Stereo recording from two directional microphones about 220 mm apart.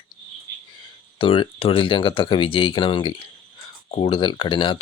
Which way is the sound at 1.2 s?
25° left (ahead or behind).